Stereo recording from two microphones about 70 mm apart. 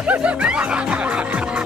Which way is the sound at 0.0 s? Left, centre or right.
Centre.